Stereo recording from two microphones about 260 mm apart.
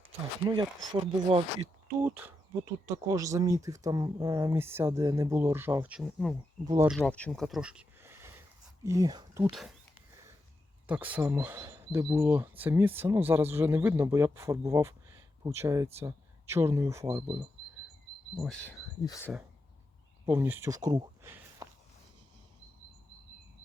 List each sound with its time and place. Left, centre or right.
0.4 s speech: centre
2.0 s speech: centre
6.7 s speech: centre
6.9 s speech: centre
10.8 s speech: centre
18.3 s speech: centre
20.2 s speech: centre